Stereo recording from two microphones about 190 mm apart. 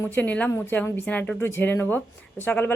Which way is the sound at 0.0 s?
10° left (ahead or behind).